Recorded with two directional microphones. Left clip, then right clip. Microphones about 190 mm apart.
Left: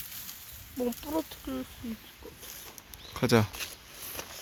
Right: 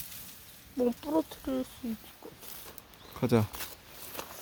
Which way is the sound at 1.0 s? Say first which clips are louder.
Right 3 dB; 50° right (ahead or behind).